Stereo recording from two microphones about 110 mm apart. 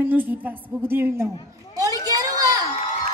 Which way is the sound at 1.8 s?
35° right (ahead or behind).